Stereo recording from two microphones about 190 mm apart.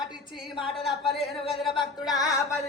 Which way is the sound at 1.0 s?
30° left (ahead or behind).